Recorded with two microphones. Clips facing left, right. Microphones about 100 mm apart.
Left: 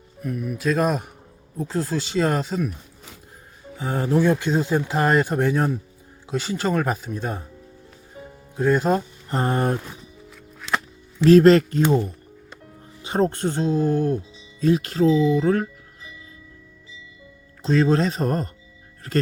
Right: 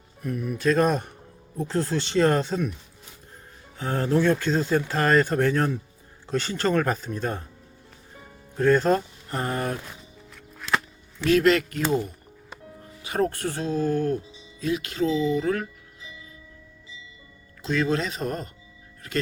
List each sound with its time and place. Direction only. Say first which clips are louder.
0.2 s speech: left 1 dB; centre (ahead or behind)
3.8 s speech: left 2 dB; 15° left (ahead or behind)
8.5 s speech: even; 10° left (ahead or behind)
9.3 s speech: left 5 dB; 30° left (ahead or behind)
11.2 s speech: left 7 dB; 35° left (ahead or behind)
14.6 s speech: left 7 dB; 35° left (ahead or behind)
17.6 s speech: left 6 dB; 30° left (ahead or behind)